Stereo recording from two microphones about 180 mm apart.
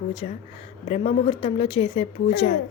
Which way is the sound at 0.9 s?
35° left (ahead or behind).